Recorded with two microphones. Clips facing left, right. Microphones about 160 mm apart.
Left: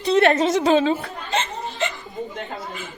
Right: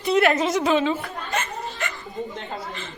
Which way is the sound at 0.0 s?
30° left (ahead or behind).